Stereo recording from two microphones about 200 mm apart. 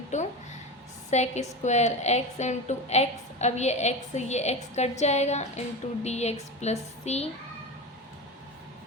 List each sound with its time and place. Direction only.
0.1 s a woman's voice: 35° left (ahead or behind)